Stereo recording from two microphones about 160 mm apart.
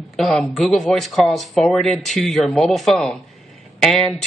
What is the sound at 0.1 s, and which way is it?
Speech, centre (ahead or behind).